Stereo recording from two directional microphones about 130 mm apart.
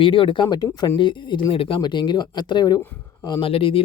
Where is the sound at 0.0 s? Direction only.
40° left (ahead or behind).